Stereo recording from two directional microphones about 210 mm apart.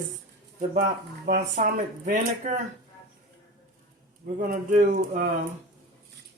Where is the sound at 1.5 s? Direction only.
40° right (ahead or behind).